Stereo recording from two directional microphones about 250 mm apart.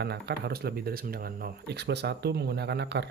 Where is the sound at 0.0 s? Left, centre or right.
Right.